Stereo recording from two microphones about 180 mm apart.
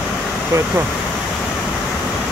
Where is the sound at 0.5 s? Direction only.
15° right (ahead or behind).